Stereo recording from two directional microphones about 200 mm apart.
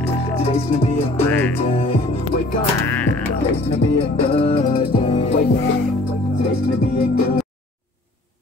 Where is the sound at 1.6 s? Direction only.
35° left (ahead or behind).